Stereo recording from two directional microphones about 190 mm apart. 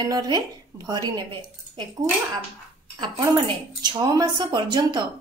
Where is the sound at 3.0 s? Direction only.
25° right (ahead or behind).